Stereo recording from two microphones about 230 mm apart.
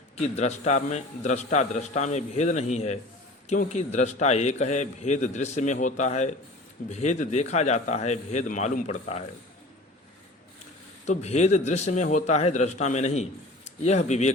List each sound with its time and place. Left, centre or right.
0.2 s a man's voice: left
11.0 s a man's voice: left